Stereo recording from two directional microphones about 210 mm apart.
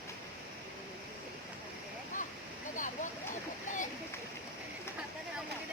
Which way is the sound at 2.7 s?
35° left (ahead or behind).